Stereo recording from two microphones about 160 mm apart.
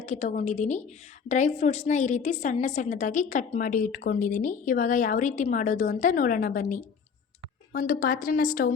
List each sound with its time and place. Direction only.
0.0 s a woman's voice: 50° left (ahead or behind)